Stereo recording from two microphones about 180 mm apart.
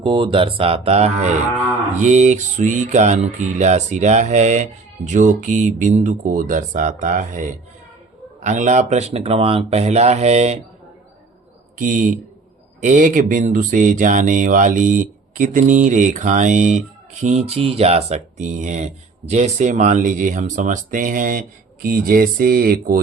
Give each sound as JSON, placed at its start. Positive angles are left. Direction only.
{"t": 0.0, "sound": "mantra", "side_deg": -30}
{"t": 8.4, "sound": "mantra", "side_deg": -40}
{"t": 11.8, "sound": "speech", "side_deg": -45}